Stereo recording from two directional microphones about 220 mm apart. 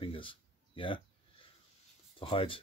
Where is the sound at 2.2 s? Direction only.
25° left (ahead or behind).